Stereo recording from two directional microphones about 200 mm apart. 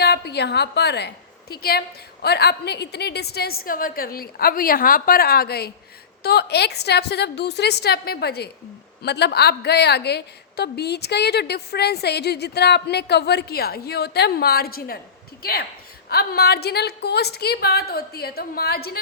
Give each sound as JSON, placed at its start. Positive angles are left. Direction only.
{"t": 0.0, "sound": "a woman's voice", "side_deg": 55}
{"t": 16.0, "sound": "a woman's voice", "side_deg": 50}